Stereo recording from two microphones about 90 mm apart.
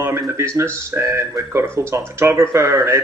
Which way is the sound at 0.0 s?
30° right (ahead or behind).